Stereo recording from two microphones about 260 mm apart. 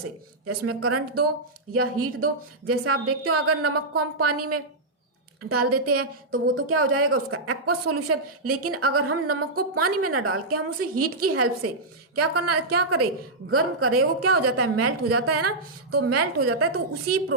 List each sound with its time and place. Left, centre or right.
0.4 s a woman's voice: right